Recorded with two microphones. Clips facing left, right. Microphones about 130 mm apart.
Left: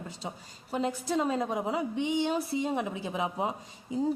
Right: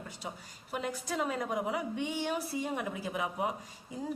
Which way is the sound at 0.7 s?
30° left (ahead or behind).